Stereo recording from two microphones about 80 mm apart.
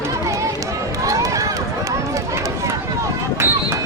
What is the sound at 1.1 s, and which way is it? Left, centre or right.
Run, right.